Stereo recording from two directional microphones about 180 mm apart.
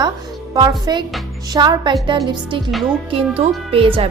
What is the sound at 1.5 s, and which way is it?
Speech, 25° right (ahead or behind).